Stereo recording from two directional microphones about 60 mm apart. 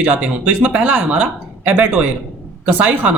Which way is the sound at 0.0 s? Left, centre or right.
Right.